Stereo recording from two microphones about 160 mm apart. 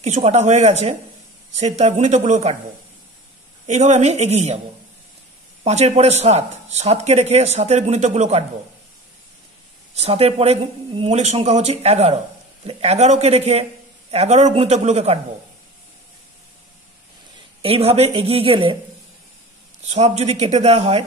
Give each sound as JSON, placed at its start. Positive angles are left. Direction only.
{"t": 0.0, "sound": "speech", "side_deg": -45}
{"t": 3.6, "sound": "speech", "side_deg": -45}
{"t": 5.6, "sound": "speech", "side_deg": -45}
{"t": 9.9, "sound": "speech", "side_deg": -40}
{"t": 17.6, "sound": "speech", "side_deg": -35}
{"t": 19.8, "sound": "speech", "side_deg": -45}